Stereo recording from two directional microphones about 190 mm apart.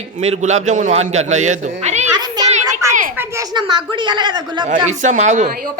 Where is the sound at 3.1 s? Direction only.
15° right (ahead or behind).